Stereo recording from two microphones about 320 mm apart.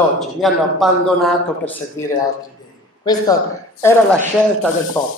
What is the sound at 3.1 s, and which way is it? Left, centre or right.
Speech, centre.